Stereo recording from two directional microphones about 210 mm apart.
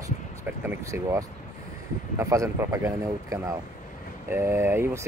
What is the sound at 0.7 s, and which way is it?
Speech, 10° right (ahead or behind).